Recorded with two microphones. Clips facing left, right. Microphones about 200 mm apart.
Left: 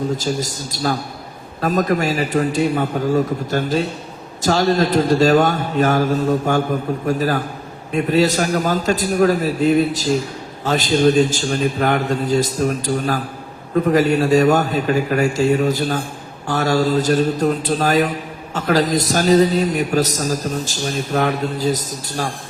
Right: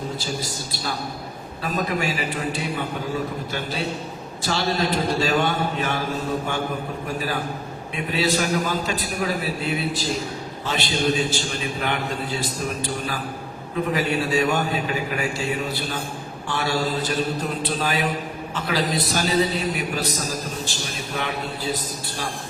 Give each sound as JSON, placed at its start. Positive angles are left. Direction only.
{"t": 0.3, "sound": "a man's voice", "side_deg": 45}